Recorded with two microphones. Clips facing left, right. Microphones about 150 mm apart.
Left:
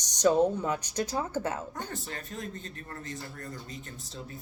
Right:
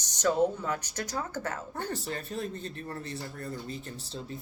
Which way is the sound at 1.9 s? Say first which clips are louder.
Right 4 dB; 35° right (ahead or behind).